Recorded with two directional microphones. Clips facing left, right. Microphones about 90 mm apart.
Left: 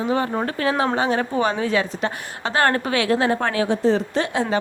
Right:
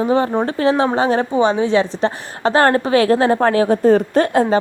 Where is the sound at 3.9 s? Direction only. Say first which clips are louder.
Right 7 dB; 45° right (ahead or behind).